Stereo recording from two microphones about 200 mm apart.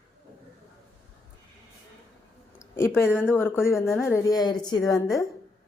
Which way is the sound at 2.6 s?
10° left (ahead or behind).